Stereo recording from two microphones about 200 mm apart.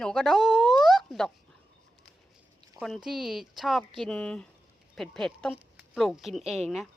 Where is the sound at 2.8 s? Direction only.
Centre (ahead or behind).